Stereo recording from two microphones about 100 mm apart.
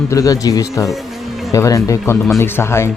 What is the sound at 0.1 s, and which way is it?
Speech, 35° left (ahead or behind).